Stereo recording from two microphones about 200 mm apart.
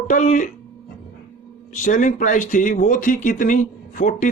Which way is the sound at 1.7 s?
40° left (ahead or behind).